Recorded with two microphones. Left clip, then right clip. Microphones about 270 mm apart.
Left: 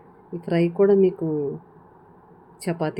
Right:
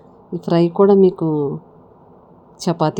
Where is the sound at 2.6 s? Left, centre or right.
Right.